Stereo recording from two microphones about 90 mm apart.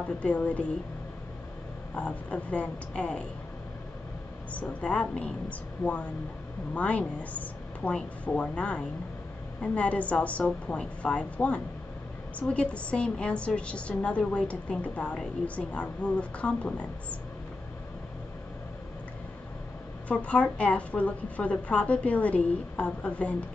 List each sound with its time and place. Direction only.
0.0 s a woman's voice: 15° left (ahead or behind)
2.0 s a woman's voice: 15° left (ahead or behind)
4.6 s a woman's voice: 15° left (ahead or behind)
20.1 s a woman's voice: 15° left (ahead or behind)